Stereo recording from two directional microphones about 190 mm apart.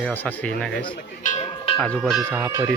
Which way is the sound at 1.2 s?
40° left (ahead or behind).